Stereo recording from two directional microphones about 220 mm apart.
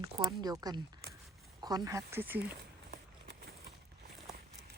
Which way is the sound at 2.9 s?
45° right (ahead or behind).